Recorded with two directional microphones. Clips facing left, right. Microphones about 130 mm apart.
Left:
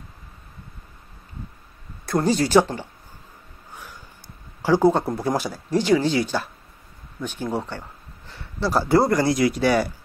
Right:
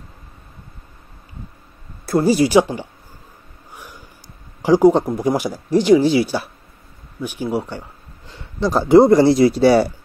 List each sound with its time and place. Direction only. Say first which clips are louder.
2.0 s speech: right 5 dB; 5° right (ahead or behind)
3.7 s a sound: right 2 dB; 15° right (ahead or behind)
4.6 s speech: right 5 dB; 15° right (ahead or behind); by 9.9 s 30° right (ahead or behind)